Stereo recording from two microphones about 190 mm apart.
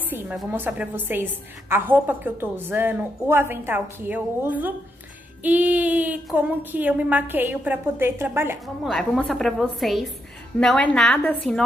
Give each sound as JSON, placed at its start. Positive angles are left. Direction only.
{"t": 0.1, "sound": "a woman's voice", "side_deg": -10}
{"t": 8.8, "sound": "a woman's voice", "side_deg": 0}